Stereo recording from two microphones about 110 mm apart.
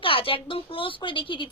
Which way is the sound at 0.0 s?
55° left (ahead or behind).